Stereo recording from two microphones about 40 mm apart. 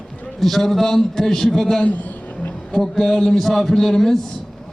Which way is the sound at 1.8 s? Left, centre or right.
Left.